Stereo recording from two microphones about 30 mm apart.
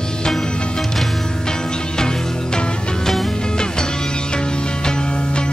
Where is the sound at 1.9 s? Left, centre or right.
Left.